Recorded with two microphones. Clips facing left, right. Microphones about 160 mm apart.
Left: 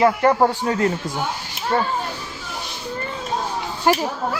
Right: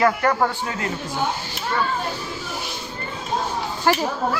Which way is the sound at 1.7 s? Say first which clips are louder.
Left 4 dB; 40° left (ahead or behind).